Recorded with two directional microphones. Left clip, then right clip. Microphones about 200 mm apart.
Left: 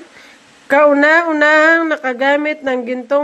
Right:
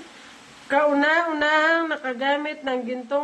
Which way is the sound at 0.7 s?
35° left (ahead or behind).